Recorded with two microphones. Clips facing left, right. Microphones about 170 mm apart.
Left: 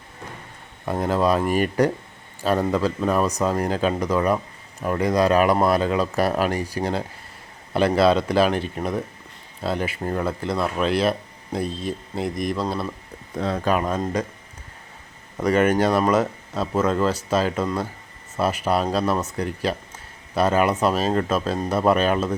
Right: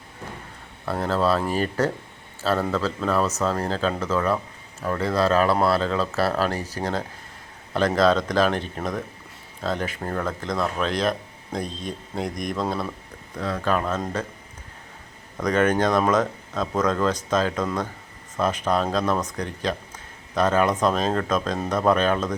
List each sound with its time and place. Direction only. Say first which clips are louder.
0.9 s speech: left 2 dB; 15° left (ahead or behind); by 12.9 s centre (ahead or behind)
13.3 s speech: left 3 dB; 25° left (ahead or behind)
13.7 s speech: left 1 dB; 15° left (ahead or behind)
15.4 s speech: left 2 dB; 10° left (ahead or behind)